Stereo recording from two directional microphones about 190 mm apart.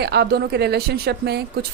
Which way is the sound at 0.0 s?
60° right (ahead or behind).